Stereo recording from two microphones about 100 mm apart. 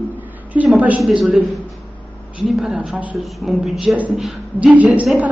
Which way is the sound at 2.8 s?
15° right (ahead or behind).